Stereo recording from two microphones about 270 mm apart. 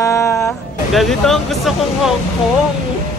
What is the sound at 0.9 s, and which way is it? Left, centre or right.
Speech, centre.